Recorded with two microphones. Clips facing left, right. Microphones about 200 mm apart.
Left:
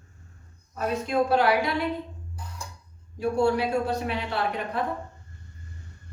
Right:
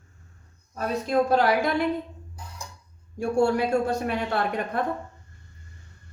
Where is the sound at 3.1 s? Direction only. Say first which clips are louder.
Right 1 dB; 50° right (ahead or behind).